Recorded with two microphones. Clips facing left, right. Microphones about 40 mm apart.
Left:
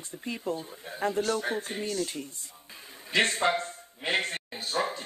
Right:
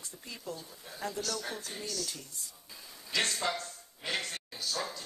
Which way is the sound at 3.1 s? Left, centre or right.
Left.